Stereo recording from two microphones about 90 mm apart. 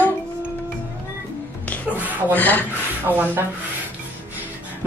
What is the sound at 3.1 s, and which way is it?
Speech, 25° right (ahead or behind).